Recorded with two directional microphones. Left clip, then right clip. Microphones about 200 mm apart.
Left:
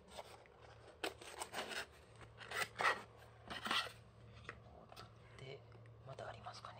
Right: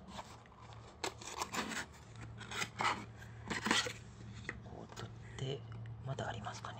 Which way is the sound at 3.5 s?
5° right (ahead or behind).